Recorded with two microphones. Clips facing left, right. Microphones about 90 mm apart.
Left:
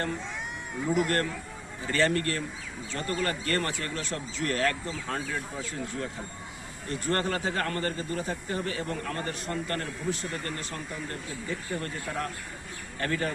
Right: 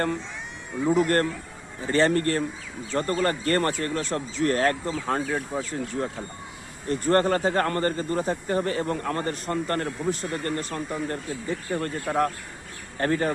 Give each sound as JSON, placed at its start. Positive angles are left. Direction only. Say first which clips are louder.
{"t": 0.9, "sound": "speech", "louder": "right 5 dB", "side_deg": -35}
{"t": 6.8, "sound": "speech", "louder": "right 8 dB", "side_deg": -40}
{"t": 13.0, "sound": "speech", "louder": "right 6 dB", "side_deg": -35}